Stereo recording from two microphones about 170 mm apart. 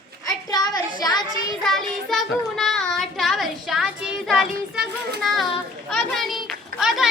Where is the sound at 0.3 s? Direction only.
25° left (ahead or behind).